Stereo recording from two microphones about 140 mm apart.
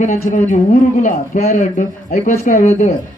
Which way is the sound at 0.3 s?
60° left (ahead or behind).